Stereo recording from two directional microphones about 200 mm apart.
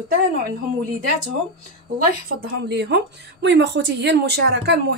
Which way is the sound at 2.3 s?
55° right (ahead or behind).